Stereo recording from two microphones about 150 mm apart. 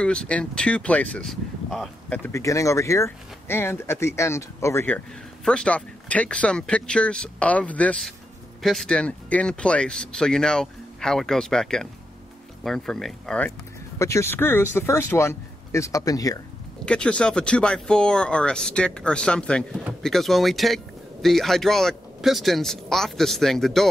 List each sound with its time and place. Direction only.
0.0 s a man's voice: 5° left (ahead or behind)
13.9 s speech: 20° left (ahead or behind)
16.8 s a man's voice: 5° left (ahead or behind)